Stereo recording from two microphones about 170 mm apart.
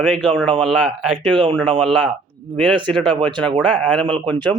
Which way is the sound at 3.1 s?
30° right (ahead or behind).